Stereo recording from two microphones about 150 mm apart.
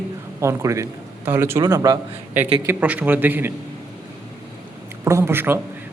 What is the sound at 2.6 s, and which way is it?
Speech, 10° right (ahead or behind).